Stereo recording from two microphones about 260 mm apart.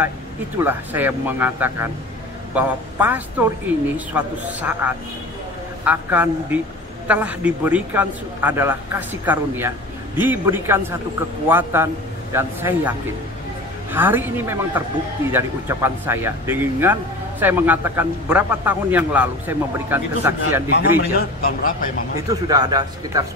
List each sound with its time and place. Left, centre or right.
0.6 s a man's voice: centre
13.9 s speech: centre
20.7 s a man's voice: left
22.3 s speech: centre